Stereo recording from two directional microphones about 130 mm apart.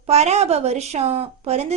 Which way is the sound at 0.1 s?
55° right (ahead or behind).